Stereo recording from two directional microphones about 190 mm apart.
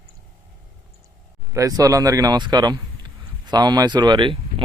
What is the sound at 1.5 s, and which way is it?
Speech, 15° right (ahead or behind).